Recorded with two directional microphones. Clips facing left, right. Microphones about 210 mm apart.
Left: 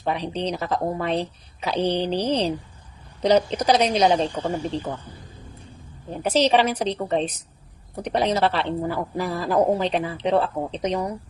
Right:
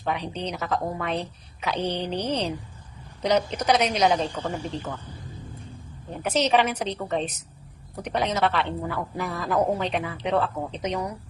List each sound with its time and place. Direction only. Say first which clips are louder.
0.0 s a woman's voice: left 4 dB; 30° left (ahead or behind)
6.2 s a woman's voice: left 3 dB; 30° left (ahead or behind)